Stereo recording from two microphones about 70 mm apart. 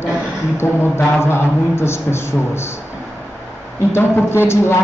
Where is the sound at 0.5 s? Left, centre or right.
Left.